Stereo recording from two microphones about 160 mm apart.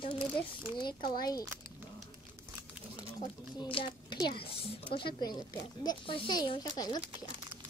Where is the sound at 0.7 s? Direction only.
30° left (ahead or behind).